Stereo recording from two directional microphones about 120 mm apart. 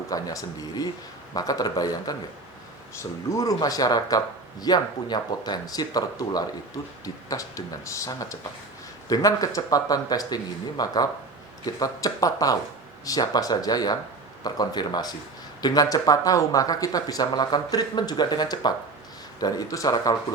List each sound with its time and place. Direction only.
0.1 s speech: 30° left (ahead or behind)